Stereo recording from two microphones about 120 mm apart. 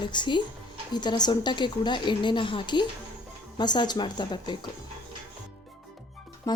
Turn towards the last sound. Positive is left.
turn(degrees=30)  # may be behind; listen again after turning